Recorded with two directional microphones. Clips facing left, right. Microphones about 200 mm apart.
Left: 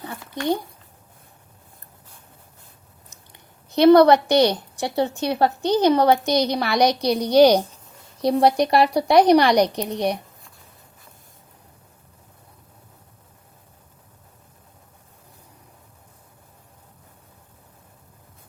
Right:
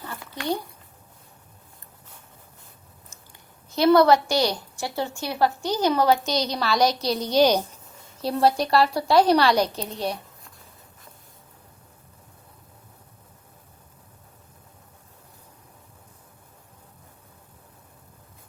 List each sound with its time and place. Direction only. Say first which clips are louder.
3.8 s a woman's voice: left 4 dB; 20° left (ahead or behind)
6.1 s a woman's voice: left 3 dB; 55° left (ahead or behind)
6.6 s a woman's voice: left 3 dB; 15° left (ahead or behind)